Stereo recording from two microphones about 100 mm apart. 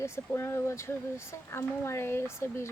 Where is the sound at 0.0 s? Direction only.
25° left (ahead or behind).